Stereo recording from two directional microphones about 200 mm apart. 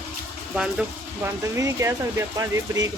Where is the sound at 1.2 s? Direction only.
15° right (ahead or behind).